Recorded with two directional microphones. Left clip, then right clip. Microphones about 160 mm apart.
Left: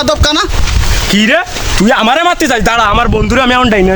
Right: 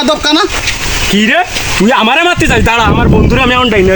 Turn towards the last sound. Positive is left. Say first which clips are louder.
# right 1 dB
turn(degrees=55)  # may be behind; listen again after turning